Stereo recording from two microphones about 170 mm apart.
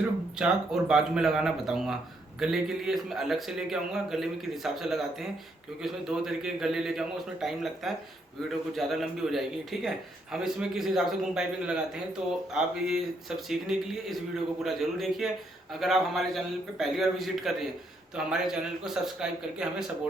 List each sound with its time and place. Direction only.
0.3 s a man's voice: 5° right (ahead or behind)
13.5 s a man's voice: centre (ahead or behind)